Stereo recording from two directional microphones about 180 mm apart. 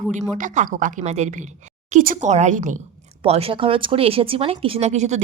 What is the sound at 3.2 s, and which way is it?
A woman's voice, 35° right (ahead or behind).